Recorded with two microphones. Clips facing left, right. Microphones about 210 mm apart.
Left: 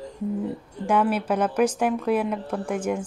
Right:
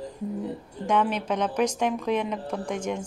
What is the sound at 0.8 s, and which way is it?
A woman's voice, 10° left (ahead or behind).